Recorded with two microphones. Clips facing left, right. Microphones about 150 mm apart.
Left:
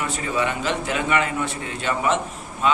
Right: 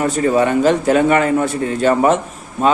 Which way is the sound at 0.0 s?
45° right (ahead or behind).